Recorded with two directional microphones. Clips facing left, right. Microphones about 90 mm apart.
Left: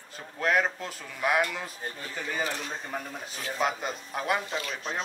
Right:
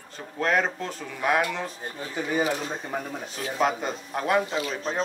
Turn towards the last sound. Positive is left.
turn(degrees=-35)  # may be behind; listen again after turning